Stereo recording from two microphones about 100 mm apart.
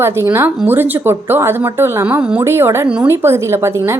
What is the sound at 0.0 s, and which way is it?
A woman's voice, 25° right (ahead or behind).